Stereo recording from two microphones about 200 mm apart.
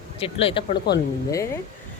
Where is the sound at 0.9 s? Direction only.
55° left (ahead or behind).